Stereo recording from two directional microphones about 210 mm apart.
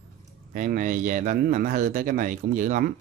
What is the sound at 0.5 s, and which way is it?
A man's voice, 40° right (ahead or behind).